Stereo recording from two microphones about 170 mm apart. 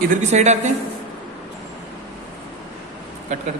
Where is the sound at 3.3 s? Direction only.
45° right (ahead or behind).